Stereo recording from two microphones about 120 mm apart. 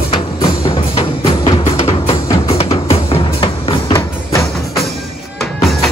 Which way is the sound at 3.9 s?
25° left (ahead or behind).